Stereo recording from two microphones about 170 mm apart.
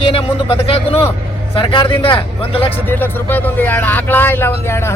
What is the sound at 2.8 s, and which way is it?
Speech, 10° left (ahead or behind).